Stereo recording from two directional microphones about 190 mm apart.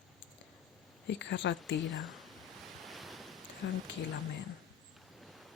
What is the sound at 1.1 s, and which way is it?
Speech, 65° left (ahead or behind).